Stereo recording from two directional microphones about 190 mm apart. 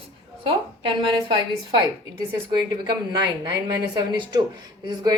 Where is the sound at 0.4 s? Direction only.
30° right (ahead or behind).